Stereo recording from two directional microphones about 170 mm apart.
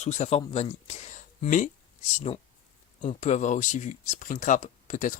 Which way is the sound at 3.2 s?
45° left (ahead or behind).